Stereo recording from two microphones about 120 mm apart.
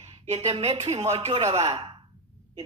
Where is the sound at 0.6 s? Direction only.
65° right (ahead or behind).